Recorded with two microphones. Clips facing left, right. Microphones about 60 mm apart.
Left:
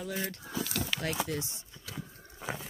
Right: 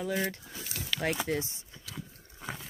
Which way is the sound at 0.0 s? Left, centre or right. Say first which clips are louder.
Right 4 dB; right.